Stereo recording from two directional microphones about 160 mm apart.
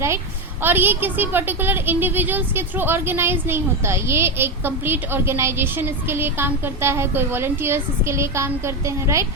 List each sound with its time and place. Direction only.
0.6 s a woman's voice: 10° right (ahead or behind)